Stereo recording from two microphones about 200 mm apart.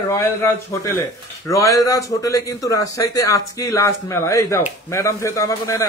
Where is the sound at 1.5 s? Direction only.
15° left (ahead or behind).